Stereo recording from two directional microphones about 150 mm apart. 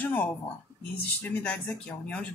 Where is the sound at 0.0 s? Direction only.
10° left (ahead or behind).